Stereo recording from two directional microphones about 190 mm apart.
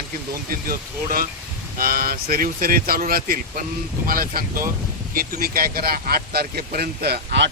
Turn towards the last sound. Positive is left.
turn(degrees=-65)  # may be behind; listen again after turning